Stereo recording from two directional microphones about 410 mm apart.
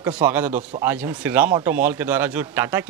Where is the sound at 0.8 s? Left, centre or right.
Centre.